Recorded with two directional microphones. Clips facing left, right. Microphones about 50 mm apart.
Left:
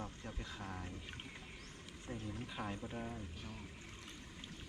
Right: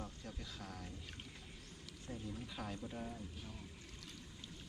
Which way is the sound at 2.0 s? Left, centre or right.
Left.